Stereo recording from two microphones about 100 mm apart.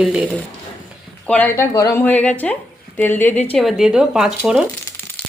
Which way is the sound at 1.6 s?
30° left (ahead or behind).